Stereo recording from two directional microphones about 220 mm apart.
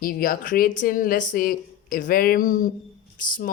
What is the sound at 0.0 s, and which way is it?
A woman's voice, 40° left (ahead or behind).